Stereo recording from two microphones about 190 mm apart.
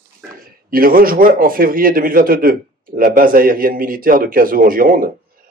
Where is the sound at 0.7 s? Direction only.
50° right (ahead or behind).